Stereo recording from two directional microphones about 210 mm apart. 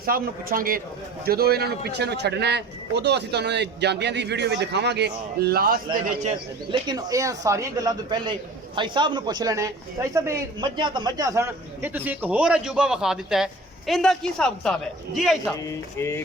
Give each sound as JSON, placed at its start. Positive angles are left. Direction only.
{"t": 0.0, "sound": "a man's voice", "side_deg": -45}
{"t": 6.7, "sound": "a man's voice", "side_deg": -20}
{"t": 15.5, "sound": "speech", "side_deg": 15}